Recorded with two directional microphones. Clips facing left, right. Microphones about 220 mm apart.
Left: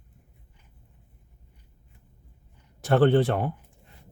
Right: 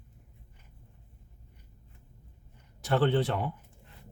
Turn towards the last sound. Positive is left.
turn(degrees=50)  # may be behind; listen again after turning